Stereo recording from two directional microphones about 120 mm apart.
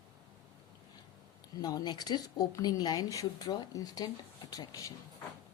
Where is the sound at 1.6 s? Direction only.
35° left (ahead or behind).